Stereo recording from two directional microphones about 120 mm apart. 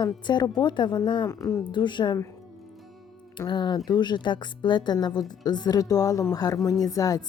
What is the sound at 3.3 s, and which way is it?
Speech, 40° left (ahead or behind).